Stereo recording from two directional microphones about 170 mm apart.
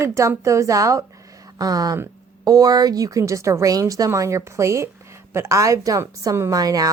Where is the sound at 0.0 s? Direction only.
15° right (ahead or behind).